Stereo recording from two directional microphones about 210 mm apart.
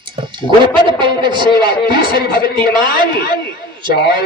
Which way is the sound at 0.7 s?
25° right (ahead or behind).